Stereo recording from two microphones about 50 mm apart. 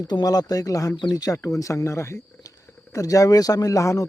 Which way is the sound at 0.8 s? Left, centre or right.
Left.